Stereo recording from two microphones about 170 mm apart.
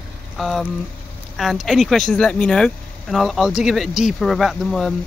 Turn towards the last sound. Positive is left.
turn(degrees=0)  # may be behind; listen again after turning